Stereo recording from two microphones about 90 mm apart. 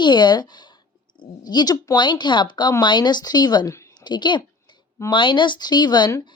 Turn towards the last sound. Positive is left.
turn(degrees=55)  # may be behind; listen again after turning